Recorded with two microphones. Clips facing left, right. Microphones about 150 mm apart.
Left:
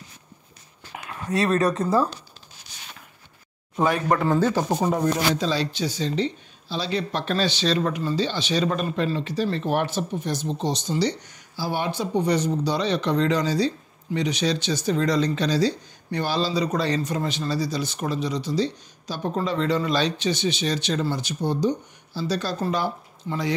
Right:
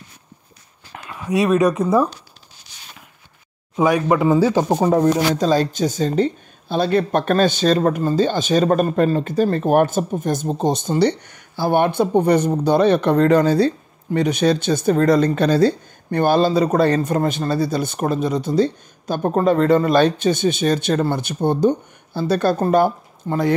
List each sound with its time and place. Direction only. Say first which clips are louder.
1.3 s speech: right 5 dB; 15° right (ahead or behind)
3.7 s speech: right 5 dB; 5° right (ahead or behind)
5.0 s speech: right 6 dB; 45° right (ahead or behind)